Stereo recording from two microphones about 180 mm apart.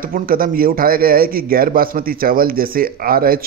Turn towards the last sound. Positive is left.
turn(degrees=-55)  # may be behind; listen again after turning